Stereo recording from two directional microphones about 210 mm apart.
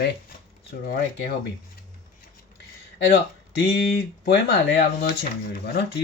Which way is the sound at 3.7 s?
50° left (ahead or behind).